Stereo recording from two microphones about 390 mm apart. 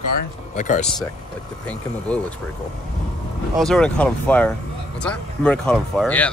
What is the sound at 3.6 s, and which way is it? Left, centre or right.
Speech, centre.